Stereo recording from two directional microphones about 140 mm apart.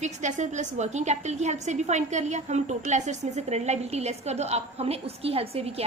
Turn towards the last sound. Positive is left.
turn(degrees=-45)  # may be behind; listen again after turning